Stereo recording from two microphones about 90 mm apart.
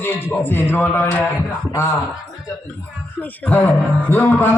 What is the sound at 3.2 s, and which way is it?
A man's voice, 20° left (ahead or behind).